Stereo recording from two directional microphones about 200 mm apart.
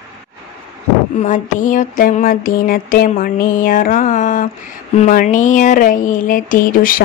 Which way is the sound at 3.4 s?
40° left (ahead or behind).